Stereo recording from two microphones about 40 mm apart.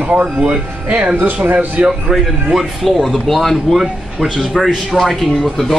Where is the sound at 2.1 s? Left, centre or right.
Centre.